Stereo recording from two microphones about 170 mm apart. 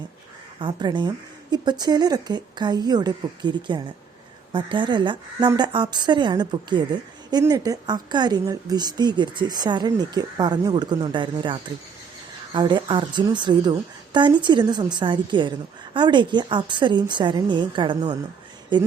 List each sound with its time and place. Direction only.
0.6 s a woman's voice: 25° right (ahead or behind)